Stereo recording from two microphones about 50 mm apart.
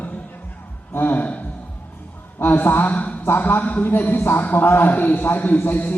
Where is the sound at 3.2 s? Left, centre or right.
Left.